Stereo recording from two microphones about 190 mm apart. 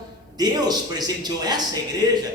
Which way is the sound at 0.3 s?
20° right (ahead or behind).